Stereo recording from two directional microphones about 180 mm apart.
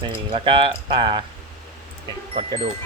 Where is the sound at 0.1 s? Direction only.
30° right (ahead or behind).